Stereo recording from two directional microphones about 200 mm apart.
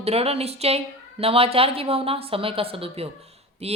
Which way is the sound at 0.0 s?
30° right (ahead or behind).